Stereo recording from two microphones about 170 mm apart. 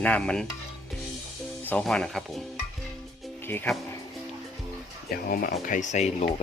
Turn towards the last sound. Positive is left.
turn(degrees=40)  # may be behind; listen again after turning